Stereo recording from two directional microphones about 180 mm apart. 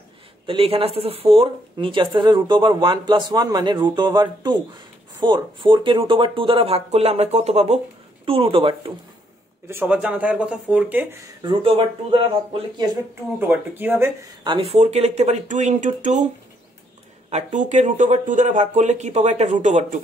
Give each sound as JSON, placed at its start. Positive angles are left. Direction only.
{"t": 0.5, "sound": "speech", "side_deg": -30}
{"t": 9.7, "sound": "speech", "side_deg": -10}
{"t": 11.4, "sound": "speech", "side_deg": -30}
{"t": 13.4, "sound": "speech", "side_deg": -10}
{"t": 14.4, "sound": "speech", "side_deg": -30}
{"t": 17.3, "sound": "speech", "side_deg": -40}